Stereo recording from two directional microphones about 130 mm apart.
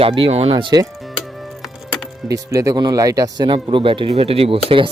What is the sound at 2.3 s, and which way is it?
Speech, 25° right (ahead or behind).